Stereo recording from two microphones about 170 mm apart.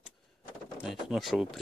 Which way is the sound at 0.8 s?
Centre (ahead or behind).